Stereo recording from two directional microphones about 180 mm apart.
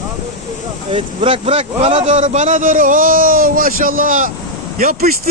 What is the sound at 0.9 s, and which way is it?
A man's voice, 30° right (ahead or behind).